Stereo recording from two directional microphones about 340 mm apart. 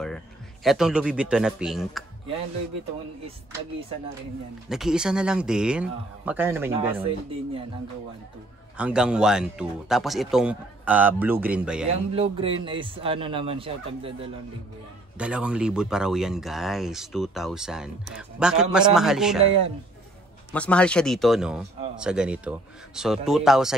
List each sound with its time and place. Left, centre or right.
0.7 s speech: centre
4.6 s a man's voice: centre
8.7 s speech: centre
11.9 s a man's voice: centre
15.1 s speech: centre
20.5 s speech: centre